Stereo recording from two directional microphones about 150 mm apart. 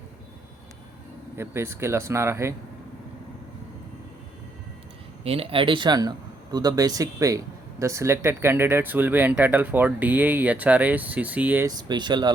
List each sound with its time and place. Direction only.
1.4 s speech: 15° right (ahead or behind)
5.2 s speech: 40° right (ahead or behind); by 11.6 s 10° right (ahead or behind)
11.6 s speech: 30° right (ahead or behind)